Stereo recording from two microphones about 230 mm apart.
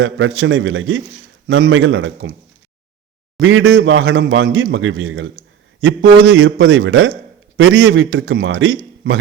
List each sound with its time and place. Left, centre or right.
0.0 s a man's voice: right
3.4 s a man's voice: right